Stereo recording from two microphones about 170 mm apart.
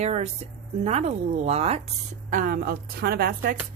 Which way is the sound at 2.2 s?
50° right (ahead or behind).